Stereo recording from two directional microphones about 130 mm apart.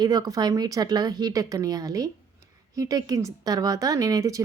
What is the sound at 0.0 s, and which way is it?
A woman's voice, 30° right (ahead or behind).